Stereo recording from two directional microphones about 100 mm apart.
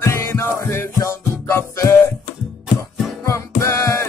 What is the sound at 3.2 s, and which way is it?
Music, 30° left (ahead or behind).